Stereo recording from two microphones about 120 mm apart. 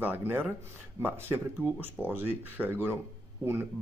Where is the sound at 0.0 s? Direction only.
15° right (ahead or behind).